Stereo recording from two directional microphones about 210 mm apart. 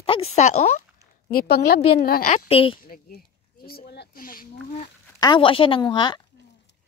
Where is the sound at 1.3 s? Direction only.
50° left (ahead or behind); by 2.8 s 25° left (ahead or behind).